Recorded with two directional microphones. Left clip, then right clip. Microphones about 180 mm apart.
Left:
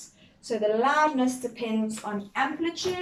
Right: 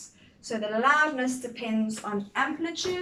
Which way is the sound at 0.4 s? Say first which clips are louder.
Left 1 dB; 20° left (ahead or behind).